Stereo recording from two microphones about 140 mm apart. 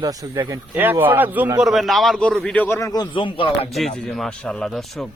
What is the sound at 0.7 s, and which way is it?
Speech, 15° right (ahead or behind).